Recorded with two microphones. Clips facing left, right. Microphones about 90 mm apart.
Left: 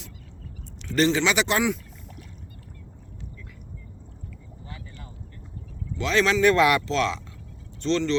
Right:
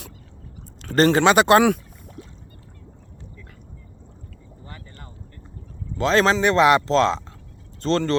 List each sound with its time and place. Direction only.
0.9 s speech: 45° right (ahead or behind)
6.0 s a man's voice: 40° right (ahead or behind)
6.4 s speech: 25° right (ahead or behind); by 8.1 s 40° right (ahead or behind)